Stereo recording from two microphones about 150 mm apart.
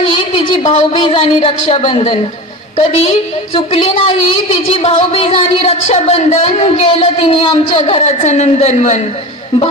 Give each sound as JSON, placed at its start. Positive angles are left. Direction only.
{"t": 0.0, "sound": "a woman's voice", "side_deg": 35}
{"t": 8.0, "sound": "a woman's voice", "side_deg": 50}